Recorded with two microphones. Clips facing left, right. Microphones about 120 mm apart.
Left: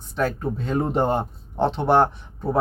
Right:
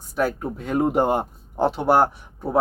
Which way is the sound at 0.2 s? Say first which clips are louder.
Even; 10° right (ahead or behind).